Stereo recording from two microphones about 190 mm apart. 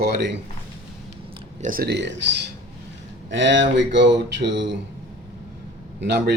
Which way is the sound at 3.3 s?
70° right (ahead or behind).